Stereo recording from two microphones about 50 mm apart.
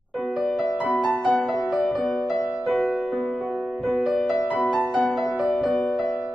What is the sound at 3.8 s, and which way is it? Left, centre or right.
Music, centre.